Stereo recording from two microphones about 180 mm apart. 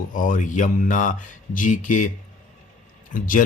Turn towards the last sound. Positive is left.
turn(degrees=50)  # may be behind; listen again after turning